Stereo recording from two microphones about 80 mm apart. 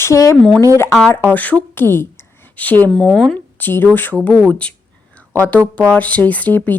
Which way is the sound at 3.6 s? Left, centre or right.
Left.